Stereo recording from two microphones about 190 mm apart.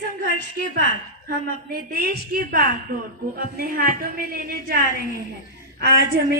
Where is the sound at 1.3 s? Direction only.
50° right (ahead or behind).